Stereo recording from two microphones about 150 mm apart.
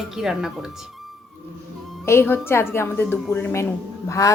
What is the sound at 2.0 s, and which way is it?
Speech, 15° left (ahead or behind).